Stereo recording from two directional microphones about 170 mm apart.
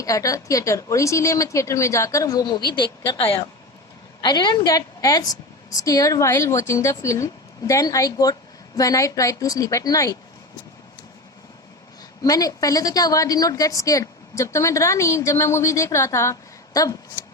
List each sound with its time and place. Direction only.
0.0 s a woman's voice: 20° left (ahead or behind)
4.2 s a woman's voice: 25° left (ahead or behind)
12.2 s a woman's voice: 20° left (ahead or behind)